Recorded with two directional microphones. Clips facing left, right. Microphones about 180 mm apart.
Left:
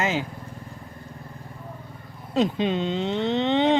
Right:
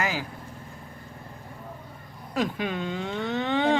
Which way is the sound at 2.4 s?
25° left (ahead or behind).